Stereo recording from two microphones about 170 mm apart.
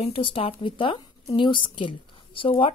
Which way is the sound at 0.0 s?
30° left (ahead or behind).